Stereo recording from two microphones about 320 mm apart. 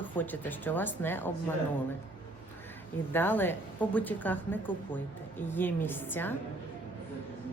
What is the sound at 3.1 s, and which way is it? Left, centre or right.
A man's voice, centre.